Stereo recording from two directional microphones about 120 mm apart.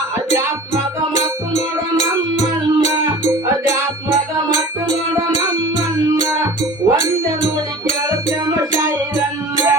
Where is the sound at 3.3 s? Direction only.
25° right (ahead or behind).